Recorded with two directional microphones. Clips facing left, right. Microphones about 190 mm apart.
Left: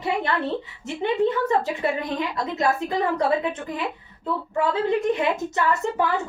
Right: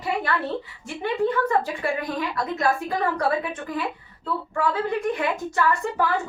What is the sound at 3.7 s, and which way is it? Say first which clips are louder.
Speech: even; 20° left (ahead or behind).